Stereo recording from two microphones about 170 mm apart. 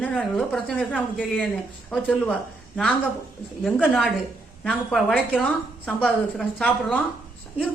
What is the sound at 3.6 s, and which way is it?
A woman's voice, centre (ahead or behind).